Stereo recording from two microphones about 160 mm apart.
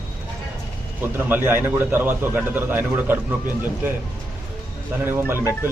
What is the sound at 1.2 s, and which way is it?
A man's voice, 15° right (ahead or behind).